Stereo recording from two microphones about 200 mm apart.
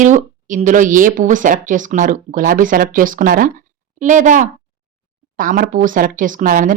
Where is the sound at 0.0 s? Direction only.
40° right (ahead or behind).